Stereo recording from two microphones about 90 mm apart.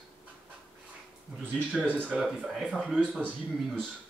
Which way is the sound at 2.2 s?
5° right (ahead or behind).